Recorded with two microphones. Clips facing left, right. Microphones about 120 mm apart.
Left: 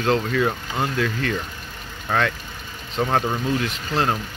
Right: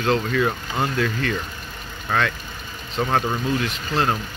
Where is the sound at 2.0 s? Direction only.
20° left (ahead or behind).